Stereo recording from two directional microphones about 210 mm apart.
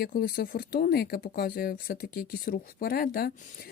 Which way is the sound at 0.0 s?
50° left (ahead or behind).